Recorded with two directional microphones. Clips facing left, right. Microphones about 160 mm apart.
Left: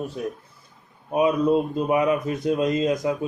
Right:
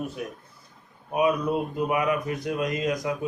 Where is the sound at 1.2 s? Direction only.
25° left (ahead or behind).